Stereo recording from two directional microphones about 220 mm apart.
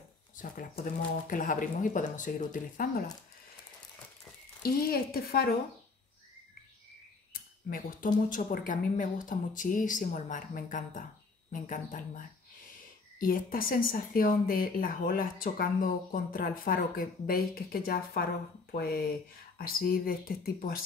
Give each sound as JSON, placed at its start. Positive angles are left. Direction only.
{"t": 0.4, "sound": "speech", "side_deg": 35}
{"t": 4.6, "sound": "speech", "side_deg": 45}
{"t": 8.3, "sound": "speech", "side_deg": 35}